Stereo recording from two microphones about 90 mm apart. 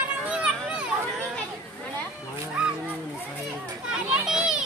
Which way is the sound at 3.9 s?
5° right (ahead or behind).